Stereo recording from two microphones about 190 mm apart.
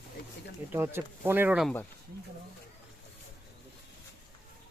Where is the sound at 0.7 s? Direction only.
10° right (ahead or behind).